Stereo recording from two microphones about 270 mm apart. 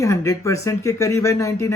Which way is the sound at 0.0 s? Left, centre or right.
Centre.